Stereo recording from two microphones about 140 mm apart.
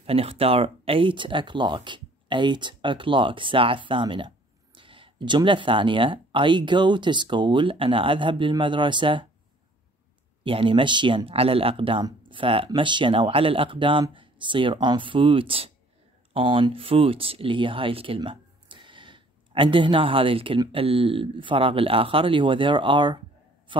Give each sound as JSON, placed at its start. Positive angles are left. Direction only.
{"t": 0.0, "sound": "speech", "side_deg": -45}
{"t": 10.4, "sound": "speech", "side_deg": -40}
{"t": 23.7, "sound": "a sound", "side_deg": -35}